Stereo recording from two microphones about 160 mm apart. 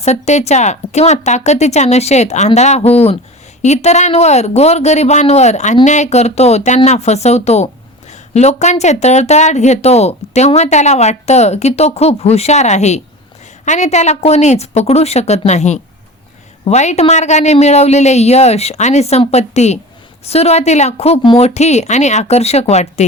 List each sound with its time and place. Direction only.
0.0 s speech: 45° left (ahead or behind)